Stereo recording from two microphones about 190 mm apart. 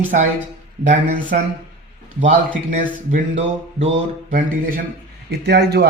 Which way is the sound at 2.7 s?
40° right (ahead or behind).